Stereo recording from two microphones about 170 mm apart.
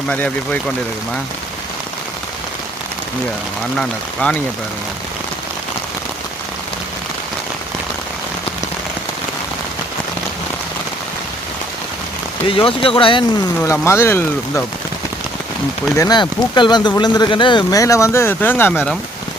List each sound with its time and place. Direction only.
0.1 s speech: 10° left (ahead or behind)
3.8 s speech: 5° left (ahead or behind)
12.5 s speech: 30° left (ahead or behind)
13.6 s speech: 10° left (ahead or behind)
16.0 s speech: 25° left (ahead or behind)